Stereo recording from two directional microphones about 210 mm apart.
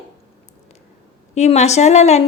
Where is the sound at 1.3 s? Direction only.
30° left (ahead or behind).